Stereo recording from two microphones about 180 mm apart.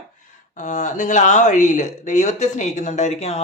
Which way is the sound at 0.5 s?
40° left (ahead or behind).